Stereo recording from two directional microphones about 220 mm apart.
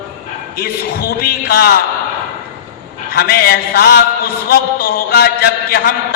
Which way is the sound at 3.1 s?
45° left (ahead or behind).